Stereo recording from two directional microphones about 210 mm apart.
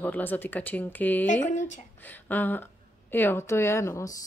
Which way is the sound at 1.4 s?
35° left (ahead or behind).